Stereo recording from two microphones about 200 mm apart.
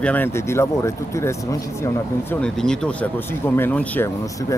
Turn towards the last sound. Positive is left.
turn(degrees=10)  # may be behind; listen again after turning